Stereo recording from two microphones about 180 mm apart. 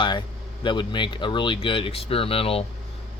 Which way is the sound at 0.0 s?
25° left (ahead or behind).